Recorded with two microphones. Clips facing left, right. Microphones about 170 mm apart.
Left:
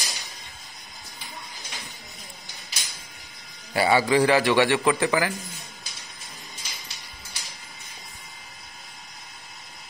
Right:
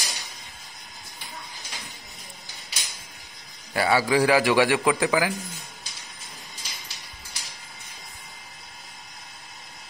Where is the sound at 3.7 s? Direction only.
5° left (ahead or behind).